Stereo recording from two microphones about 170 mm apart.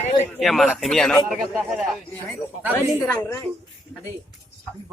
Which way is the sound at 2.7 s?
15° left (ahead or behind).